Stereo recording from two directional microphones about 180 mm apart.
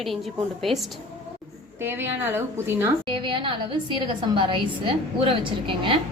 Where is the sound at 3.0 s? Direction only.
25° right (ahead or behind).